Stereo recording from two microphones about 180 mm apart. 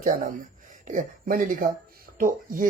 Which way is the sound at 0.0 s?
50° right (ahead or behind).